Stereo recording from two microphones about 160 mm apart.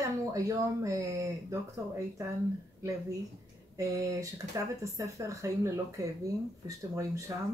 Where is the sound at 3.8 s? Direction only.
20° right (ahead or behind).